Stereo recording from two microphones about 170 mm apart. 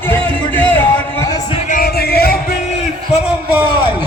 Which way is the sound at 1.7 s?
65° left (ahead or behind).